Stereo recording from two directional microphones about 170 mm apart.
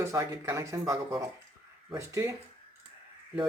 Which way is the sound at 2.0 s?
15° right (ahead or behind).